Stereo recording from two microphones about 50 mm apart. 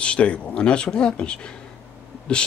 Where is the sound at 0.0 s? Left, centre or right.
Left.